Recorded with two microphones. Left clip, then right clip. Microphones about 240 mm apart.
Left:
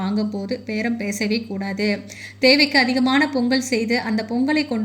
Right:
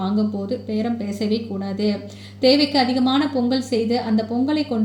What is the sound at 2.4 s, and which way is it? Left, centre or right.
A woman's voice, left.